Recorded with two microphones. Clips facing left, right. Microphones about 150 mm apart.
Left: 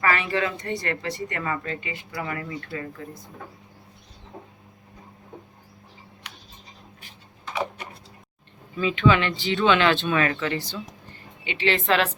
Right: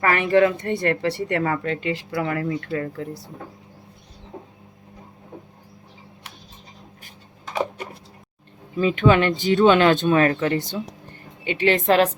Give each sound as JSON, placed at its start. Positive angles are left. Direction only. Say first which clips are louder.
{"t": 0.0, "sound": "speech", "louder": "right 7 dB", "side_deg": -55}
{"t": 8.8, "sound": "speech", "louder": "right 3 dB", "side_deg": -45}
{"t": 10.6, "sound": "speech", "louder": "right 6 dB", "side_deg": -20}
{"t": 11.1, "sound": "a woman's voice", "louder": "right 7 dB", "side_deg": -45}